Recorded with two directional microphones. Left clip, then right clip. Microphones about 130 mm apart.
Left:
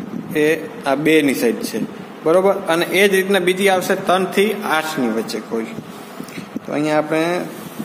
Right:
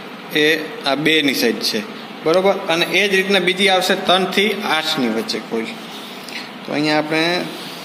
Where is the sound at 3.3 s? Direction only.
20° left (ahead or behind).